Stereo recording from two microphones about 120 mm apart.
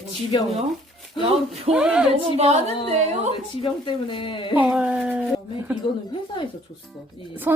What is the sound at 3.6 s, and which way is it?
Speech, 45° left (ahead or behind).